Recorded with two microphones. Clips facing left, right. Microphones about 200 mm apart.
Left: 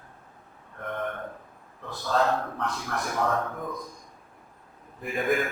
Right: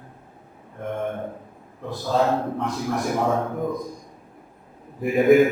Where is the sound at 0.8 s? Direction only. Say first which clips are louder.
Right 5 dB; 25° right (ahead or behind).